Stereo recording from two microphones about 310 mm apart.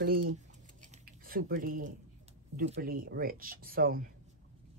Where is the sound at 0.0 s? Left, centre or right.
Right.